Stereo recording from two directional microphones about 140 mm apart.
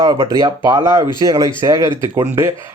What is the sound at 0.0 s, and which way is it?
Speech, 25° right (ahead or behind).